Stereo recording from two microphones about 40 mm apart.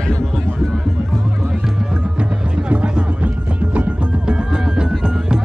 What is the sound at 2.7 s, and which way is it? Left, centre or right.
Music, right.